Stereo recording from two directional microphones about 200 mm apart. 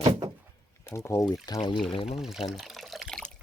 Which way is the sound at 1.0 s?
15° left (ahead or behind).